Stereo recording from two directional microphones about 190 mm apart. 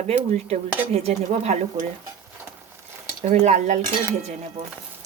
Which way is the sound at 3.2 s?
40° right (ahead or behind).